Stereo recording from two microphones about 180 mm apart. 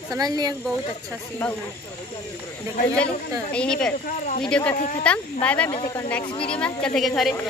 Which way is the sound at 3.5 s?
5° left (ahead or behind).